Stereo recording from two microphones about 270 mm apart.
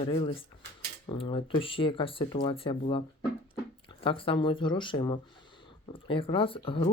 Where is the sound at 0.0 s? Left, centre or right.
Centre.